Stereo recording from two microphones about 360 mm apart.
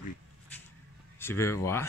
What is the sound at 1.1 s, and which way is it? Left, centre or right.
Speech, centre.